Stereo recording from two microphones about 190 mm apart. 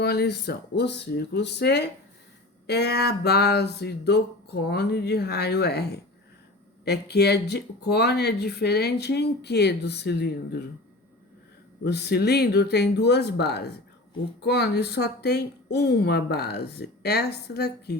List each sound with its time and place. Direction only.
0.0 s speech: 55° left (ahead or behind)
11.8 s speech: 60° left (ahead or behind)